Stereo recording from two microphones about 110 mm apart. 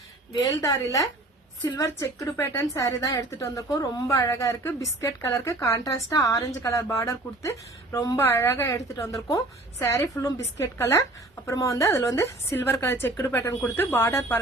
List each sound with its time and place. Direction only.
0.3 s a woman's voice: 30° left (ahead or behind)